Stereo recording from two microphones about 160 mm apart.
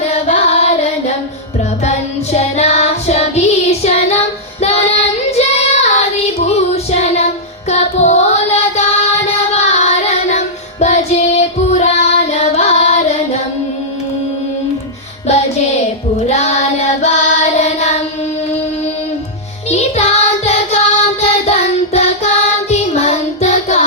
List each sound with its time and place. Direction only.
0.0 s carnatic music: 45° left (ahead or behind)
1.8 s child singing: 45° left (ahead or behind)
7.7 s music: 45° left (ahead or behind)
16.2 s child singing: 45° left (ahead or behind)
19.7 s music: 45° left (ahead or behind)
21.2 s child singing: 40° left (ahead or behind)